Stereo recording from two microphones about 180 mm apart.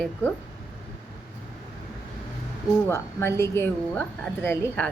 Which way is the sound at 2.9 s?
15° left (ahead or behind).